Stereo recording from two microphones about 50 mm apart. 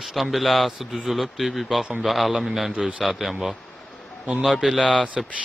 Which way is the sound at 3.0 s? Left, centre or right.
Centre.